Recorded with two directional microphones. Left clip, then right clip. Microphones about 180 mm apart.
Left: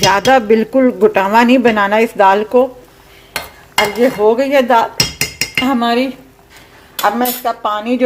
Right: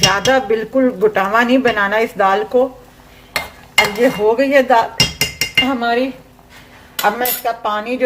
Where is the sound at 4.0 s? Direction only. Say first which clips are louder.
Left 2 dB; 35° left (ahead or behind).